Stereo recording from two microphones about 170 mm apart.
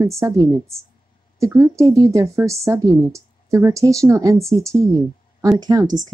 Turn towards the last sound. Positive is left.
turn(degrees=-25)  # may be behind; listen again after turning